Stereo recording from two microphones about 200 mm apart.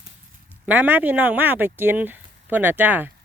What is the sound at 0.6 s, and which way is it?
Speech, 10° right (ahead or behind).